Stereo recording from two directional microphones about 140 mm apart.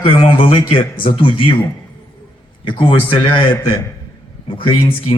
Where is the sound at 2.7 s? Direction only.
35° left (ahead or behind).